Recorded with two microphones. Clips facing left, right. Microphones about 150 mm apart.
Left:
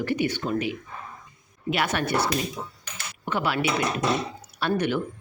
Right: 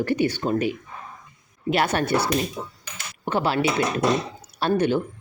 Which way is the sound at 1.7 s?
35° right (ahead or behind).